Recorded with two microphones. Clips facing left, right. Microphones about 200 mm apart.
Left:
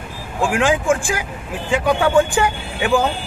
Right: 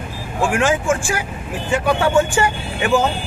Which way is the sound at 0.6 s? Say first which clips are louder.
Left 2 dB; 15° left (ahead or behind).